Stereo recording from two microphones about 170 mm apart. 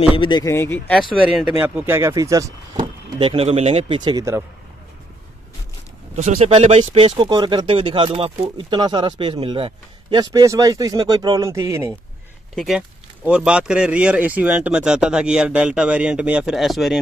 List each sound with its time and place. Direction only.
0.1 s speech: 30° left (ahead or behind); by 1.0 s 10° left (ahead or behind)
1.6 s speech: 15° right (ahead or behind)
3.2 s speech: 35° right (ahead or behind)
6.1 s speech: 40° right (ahead or behind)
7.2 s speech: 25° right (ahead or behind)
12.5 s speech: 5° right (ahead or behind)